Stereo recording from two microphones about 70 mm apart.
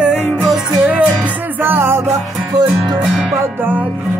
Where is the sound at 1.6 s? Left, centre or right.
Right.